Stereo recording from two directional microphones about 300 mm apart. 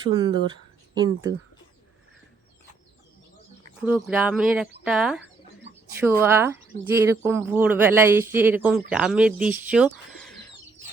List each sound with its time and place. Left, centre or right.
0.0 s speech: centre
3.8 s speech: centre